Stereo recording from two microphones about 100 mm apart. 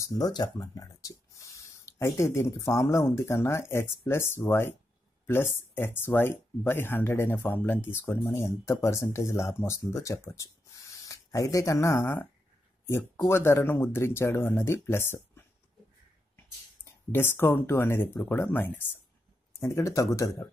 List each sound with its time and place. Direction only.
0.0 s speech: 40° left (ahead or behind); by 15.4 s 20° left (ahead or behind)
16.8 s speech: 20° left (ahead or behind)
19.6 s speech: 30° left (ahead or behind)